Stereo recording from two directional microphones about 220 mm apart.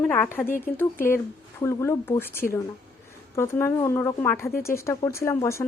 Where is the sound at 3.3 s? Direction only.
10° left (ahead or behind).